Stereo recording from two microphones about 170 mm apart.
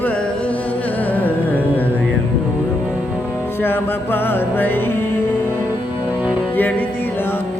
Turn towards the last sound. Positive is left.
turn(degrees=10)  # may be behind; listen again after turning